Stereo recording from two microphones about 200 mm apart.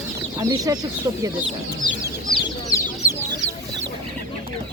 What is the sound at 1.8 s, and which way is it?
Chicken, 25° left (ahead or behind).